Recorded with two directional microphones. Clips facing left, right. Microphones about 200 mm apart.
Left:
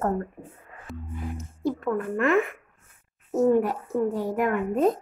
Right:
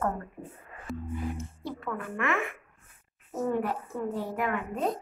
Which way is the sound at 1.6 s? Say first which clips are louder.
Left 9 dB; 45° left (ahead or behind).